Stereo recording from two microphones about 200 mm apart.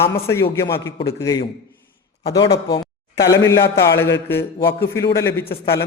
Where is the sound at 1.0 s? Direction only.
15° left (ahead or behind).